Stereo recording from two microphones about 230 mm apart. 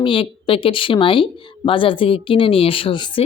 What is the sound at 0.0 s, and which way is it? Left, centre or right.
Speech, left.